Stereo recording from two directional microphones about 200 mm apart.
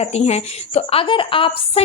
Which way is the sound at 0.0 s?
30° left (ahead or behind).